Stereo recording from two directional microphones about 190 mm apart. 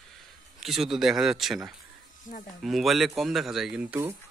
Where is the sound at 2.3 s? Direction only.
45° left (ahead or behind).